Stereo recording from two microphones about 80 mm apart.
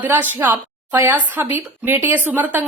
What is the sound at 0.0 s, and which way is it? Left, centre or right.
Speech, right.